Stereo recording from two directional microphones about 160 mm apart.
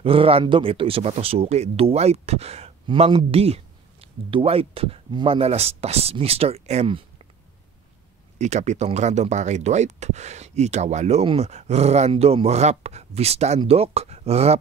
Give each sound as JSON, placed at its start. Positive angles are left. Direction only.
{"t": 0.0, "sound": "speech", "side_deg": -35}
{"t": 8.4, "sound": "speech", "side_deg": -45}